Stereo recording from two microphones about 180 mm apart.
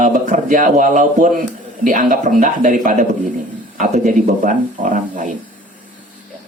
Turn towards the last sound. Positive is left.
turn(degrees=-45)  # may be behind; listen again after turning